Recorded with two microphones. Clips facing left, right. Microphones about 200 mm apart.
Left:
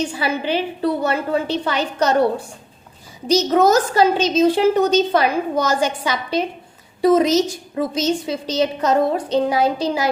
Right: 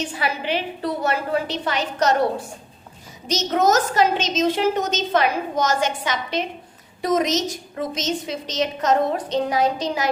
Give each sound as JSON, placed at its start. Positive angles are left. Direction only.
{"t": 0.0, "sound": "a woman's voice", "side_deg": 30}
{"t": 3.2, "sound": "a woman's voice", "side_deg": 35}